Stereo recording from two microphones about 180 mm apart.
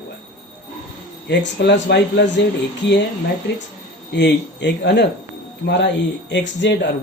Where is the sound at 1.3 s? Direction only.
75° left (ahead or behind).